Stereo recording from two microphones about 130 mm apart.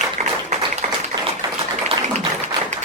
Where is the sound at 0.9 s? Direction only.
35° right (ahead or behind).